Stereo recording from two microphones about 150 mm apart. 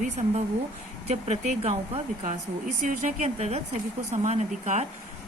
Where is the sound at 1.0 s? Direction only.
45° right (ahead or behind).